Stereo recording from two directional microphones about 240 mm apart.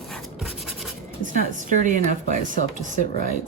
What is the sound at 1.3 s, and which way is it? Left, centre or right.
Speech, right.